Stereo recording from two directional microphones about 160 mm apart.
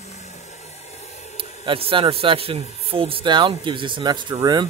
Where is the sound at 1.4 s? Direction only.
35° right (ahead or behind).